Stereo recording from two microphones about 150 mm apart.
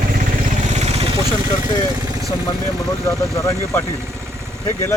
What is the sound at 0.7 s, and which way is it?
Vehicle, 45° right (ahead or behind).